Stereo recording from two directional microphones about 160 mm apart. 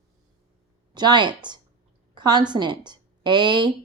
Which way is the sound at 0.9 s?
25° right (ahead or behind).